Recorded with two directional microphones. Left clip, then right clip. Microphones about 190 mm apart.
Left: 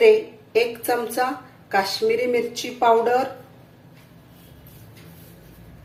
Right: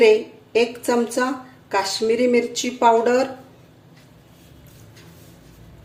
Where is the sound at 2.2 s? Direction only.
40° right (ahead or behind).